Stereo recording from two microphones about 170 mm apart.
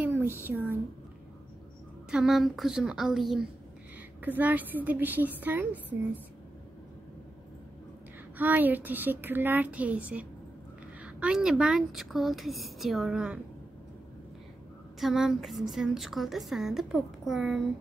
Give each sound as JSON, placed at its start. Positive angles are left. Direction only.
{"t": 0.0, "sound": "a sound", "side_deg": -10}
{"t": 2.0, "sound": "a woman's voice", "side_deg": -5}
{"t": 8.4, "sound": "a woman's voice", "side_deg": -10}
{"t": 15.0, "sound": "speech", "side_deg": 0}